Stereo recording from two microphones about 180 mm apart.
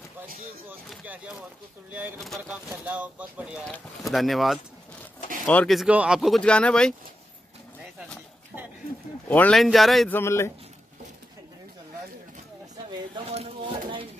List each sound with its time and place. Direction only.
0.8 s speech: 5° right (ahead or behind)
9.3 s speech: 5° left (ahead or behind)
10.1 s a man's voice: 15° left (ahead or behind)
13.1 s speech: 30° right (ahead or behind)